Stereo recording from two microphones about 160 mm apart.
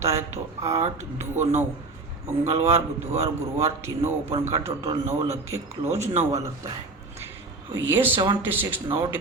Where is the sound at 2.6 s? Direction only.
15° right (ahead or behind).